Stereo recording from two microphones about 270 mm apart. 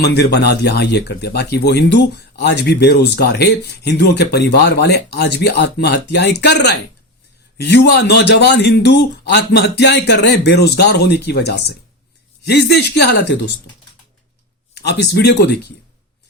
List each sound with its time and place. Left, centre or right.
0.0 s speech: left
14.8 s speech: left